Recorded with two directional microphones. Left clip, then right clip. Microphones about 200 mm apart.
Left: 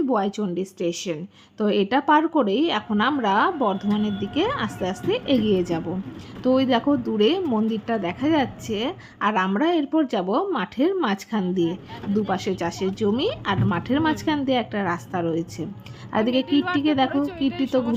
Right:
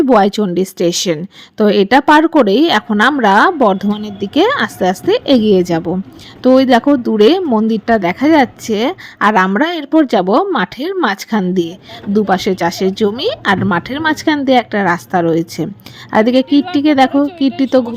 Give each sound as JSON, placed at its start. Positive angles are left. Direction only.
{"t": 0.0, "sound": "a woman's voice", "side_deg": -40}